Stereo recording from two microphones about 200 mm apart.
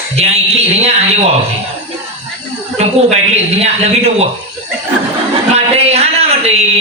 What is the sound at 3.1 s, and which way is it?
Speech, 35° right (ahead or behind).